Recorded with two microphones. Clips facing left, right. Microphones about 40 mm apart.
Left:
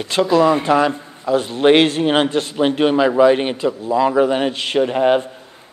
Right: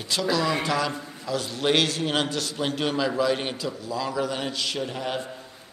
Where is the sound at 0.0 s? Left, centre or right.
Left.